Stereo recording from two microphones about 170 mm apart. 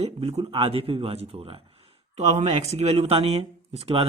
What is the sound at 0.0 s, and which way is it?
Speech, 35° right (ahead or behind).